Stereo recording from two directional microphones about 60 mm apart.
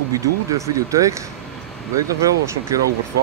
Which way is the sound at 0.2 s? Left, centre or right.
Right.